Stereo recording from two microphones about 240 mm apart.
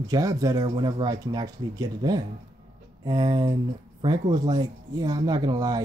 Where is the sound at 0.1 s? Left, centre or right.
Centre.